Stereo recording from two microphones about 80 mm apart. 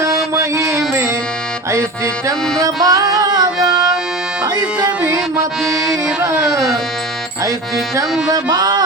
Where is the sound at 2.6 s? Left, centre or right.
Right.